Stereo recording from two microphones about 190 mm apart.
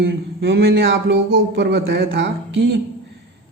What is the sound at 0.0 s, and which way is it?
Speech, 65° right (ahead or behind).